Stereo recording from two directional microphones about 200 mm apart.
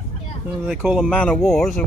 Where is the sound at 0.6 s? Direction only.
5° right (ahead or behind).